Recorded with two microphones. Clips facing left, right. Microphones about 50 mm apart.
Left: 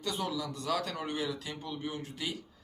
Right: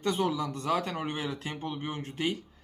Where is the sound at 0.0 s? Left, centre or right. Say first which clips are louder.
Right 6 dB; right.